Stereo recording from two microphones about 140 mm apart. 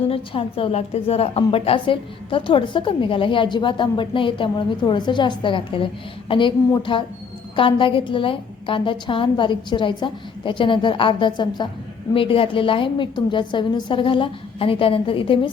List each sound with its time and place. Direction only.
0.1 s a woman's voice: 40° left (ahead or behind)